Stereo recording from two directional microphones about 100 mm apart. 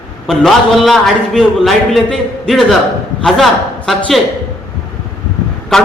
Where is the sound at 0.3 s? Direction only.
Centre (ahead or behind).